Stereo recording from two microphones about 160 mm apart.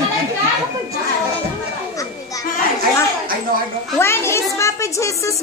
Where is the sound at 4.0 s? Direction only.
15° left (ahead or behind).